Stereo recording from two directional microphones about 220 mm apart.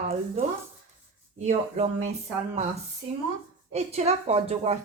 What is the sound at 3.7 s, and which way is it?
Speech, 30° right (ahead or behind).